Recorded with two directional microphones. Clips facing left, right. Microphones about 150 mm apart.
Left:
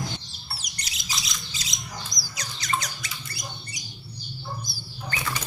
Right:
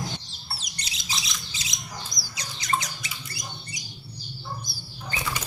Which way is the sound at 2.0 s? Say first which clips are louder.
Left 1 dB; 25° right (ahead or behind).